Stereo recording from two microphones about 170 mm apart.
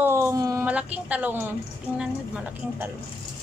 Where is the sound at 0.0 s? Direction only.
15° right (ahead or behind).